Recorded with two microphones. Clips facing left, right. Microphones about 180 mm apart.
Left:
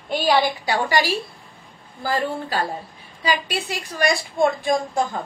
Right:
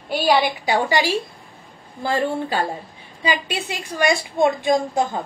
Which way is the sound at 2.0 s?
25° right (ahead or behind).